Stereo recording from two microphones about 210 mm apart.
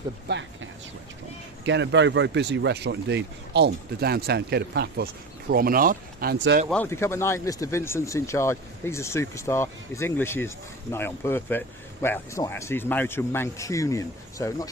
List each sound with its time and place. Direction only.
0.3 s speech: 60° right (ahead or behind)
6.7 s speech: 10° left (ahead or behind)